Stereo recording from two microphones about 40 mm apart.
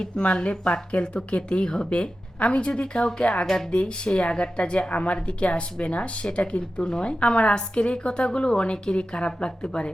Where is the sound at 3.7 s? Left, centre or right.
Left.